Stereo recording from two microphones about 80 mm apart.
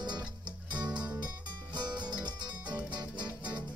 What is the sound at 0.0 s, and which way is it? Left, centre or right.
Music, right.